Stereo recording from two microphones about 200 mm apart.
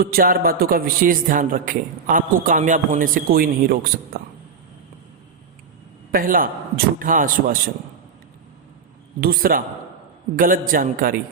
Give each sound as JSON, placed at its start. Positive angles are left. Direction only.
{"t": 0.0, "sound": "a man's voice", "side_deg": -45}
{"t": 6.1, "sound": "a man's voice", "side_deg": -45}
{"t": 9.2, "sound": "a man's voice", "side_deg": -45}